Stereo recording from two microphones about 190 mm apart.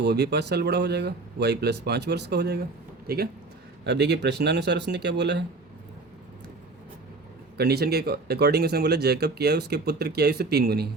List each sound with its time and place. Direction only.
0.0 s speech: 60° right (ahead or behind)
7.5 s speech: 55° right (ahead or behind)